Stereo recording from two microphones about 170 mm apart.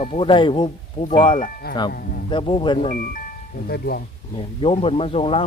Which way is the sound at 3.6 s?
65° left (ahead or behind).